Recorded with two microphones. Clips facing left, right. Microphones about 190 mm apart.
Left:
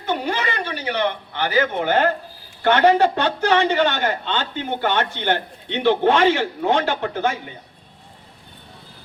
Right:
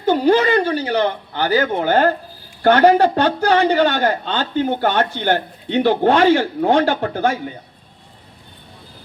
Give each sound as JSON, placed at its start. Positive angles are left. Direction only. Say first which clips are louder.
{"t": 0.0, "sound": "a man's voice", "louder": "right 9 dB", "side_deg": -35}